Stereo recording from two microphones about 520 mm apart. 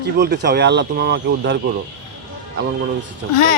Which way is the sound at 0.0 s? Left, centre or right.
Centre.